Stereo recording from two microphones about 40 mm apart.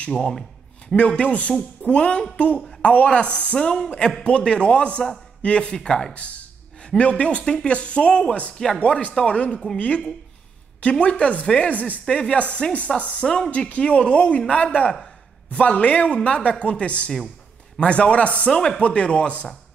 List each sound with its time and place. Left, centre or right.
0.1 s speech: centre
0.9 s speech: left
3.5 s speech: left
5.9 s speech: centre
6.1 s a sound: left
7.0 s speech: left
11.7 s speech: left
12.0 s speech: left
18.5 s speech: centre
18.8 s speech: left